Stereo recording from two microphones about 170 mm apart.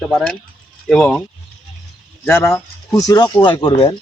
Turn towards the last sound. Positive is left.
turn(degrees=30)  # may be behind; listen again after turning